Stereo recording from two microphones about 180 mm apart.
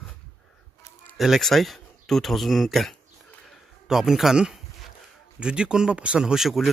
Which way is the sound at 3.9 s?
Centre (ahead or behind).